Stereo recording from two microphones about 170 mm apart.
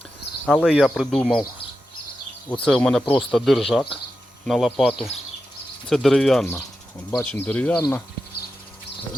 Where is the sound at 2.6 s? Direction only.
5° left (ahead or behind).